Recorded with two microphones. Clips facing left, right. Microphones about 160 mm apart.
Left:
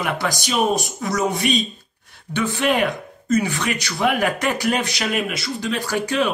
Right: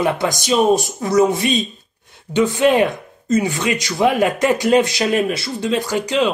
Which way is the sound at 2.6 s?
25° right (ahead or behind).